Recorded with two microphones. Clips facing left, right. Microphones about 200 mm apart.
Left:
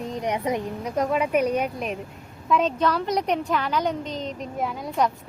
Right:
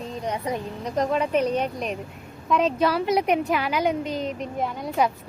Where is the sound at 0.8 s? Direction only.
10° left (ahead or behind); by 4.5 s 10° right (ahead or behind).